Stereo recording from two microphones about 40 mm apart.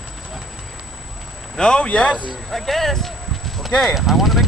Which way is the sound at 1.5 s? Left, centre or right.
Left.